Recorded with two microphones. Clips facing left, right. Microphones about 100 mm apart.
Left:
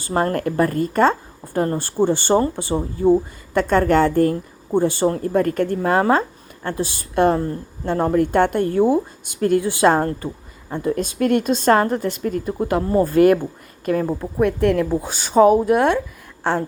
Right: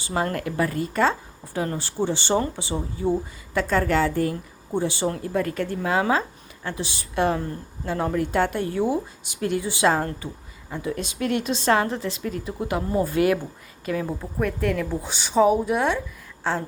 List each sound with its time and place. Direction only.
0.0 s a woman's voice: 45° left (ahead or behind)